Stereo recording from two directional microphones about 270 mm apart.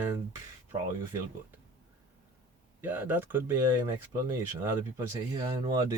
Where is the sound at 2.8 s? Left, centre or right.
Centre.